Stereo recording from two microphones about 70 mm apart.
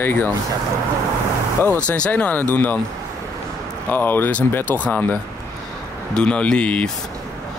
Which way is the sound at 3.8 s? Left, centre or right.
Left.